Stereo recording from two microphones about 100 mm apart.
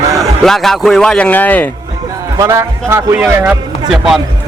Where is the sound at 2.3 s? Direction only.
30° right (ahead or behind).